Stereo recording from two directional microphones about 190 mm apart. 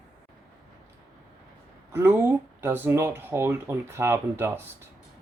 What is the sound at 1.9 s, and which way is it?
A woman's voice, 10° right (ahead or behind).